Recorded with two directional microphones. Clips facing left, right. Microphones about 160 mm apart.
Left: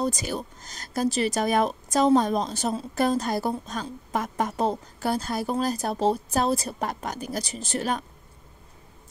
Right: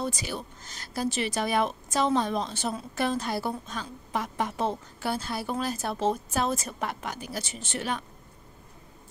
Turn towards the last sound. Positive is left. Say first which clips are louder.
# left 4 dB
turn(degrees=40)  # may be behind; listen again after turning